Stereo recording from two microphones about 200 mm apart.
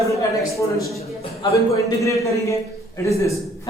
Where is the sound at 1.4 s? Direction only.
15° left (ahead or behind).